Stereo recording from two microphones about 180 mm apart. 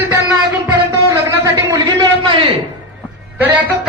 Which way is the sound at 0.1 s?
10° right (ahead or behind).